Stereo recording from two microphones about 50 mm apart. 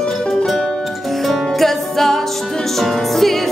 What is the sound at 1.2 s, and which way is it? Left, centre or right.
Music, centre.